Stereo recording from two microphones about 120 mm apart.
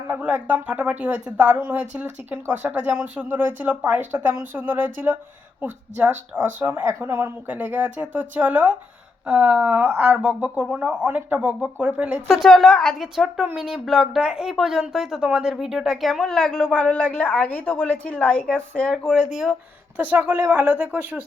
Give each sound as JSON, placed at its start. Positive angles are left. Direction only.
{"t": 0.1, "sound": "speech", "side_deg": -15}
{"t": 12.3, "sound": "speech", "side_deg": 0}
{"t": 19.3, "sound": "speech", "side_deg": -5}